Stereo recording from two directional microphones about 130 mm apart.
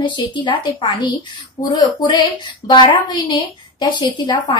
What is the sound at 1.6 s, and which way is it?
A woman's voice, 30° left (ahead or behind).